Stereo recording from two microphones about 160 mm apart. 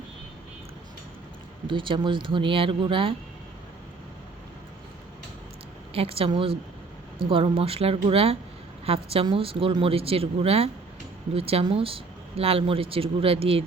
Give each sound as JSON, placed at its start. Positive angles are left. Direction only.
{"t": 1.6, "sound": "speech", "side_deg": -30}
{"t": 5.9, "sound": "speech", "side_deg": -35}